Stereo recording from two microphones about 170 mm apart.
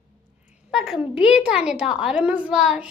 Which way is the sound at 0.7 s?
5° right (ahead or behind).